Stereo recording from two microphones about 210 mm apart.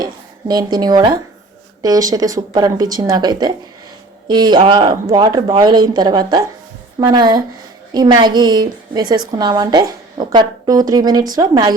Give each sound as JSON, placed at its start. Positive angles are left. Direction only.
{"t": 0.0, "sound": "a woman's voice", "side_deg": -20}